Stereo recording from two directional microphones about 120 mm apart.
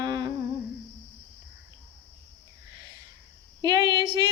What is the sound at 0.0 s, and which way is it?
Humming, 35° right (ahead or behind).